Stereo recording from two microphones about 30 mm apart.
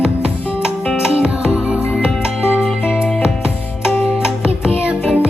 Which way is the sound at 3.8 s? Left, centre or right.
Right.